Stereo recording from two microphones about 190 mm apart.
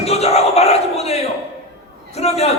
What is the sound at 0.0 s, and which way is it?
Battle cry, 35° left (ahead or behind).